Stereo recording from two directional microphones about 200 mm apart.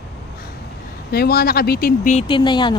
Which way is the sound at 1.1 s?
50° left (ahead or behind).